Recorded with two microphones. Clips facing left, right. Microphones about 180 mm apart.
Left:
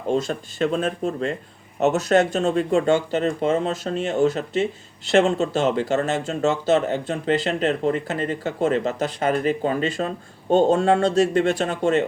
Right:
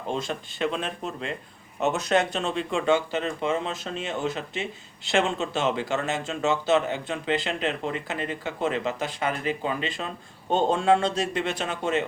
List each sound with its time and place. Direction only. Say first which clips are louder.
0.1 s speech: left 7 dB; 45° left (ahead or behind)